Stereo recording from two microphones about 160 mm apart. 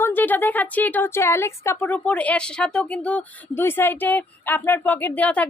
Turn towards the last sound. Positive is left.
turn(degrees=10)  # may be behind; listen again after turning